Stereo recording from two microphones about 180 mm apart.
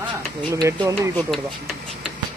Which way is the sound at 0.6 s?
15° right (ahead or behind).